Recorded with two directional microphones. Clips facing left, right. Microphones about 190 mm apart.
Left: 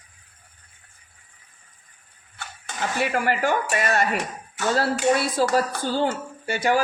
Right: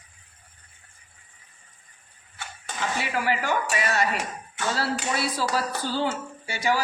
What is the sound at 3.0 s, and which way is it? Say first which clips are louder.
A man's voice: left 6 dB; 50° left (ahead or behind).